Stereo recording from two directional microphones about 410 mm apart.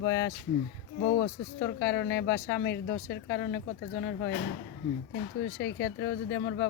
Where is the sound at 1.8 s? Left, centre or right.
Left.